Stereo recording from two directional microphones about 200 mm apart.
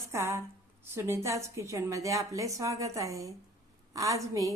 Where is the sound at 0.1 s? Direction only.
15° right (ahead or behind).